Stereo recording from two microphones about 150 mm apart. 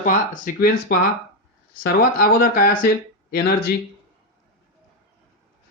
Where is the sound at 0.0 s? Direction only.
70° left (ahead or behind).